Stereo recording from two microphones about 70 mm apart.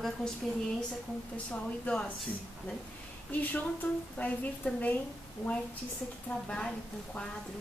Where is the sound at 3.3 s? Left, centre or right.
Left.